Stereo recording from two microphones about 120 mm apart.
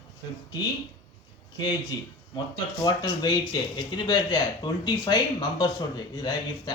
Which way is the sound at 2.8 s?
35° left (ahead or behind).